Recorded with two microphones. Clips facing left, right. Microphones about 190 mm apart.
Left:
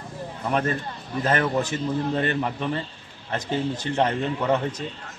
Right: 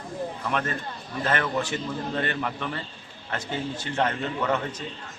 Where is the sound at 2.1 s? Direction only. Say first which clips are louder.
Left 4 dB; 30° left (ahead or behind).